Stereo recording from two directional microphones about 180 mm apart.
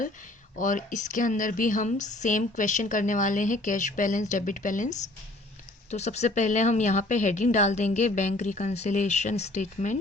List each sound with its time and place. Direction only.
0.5 s a woman's voice: 45° left (ahead or behind)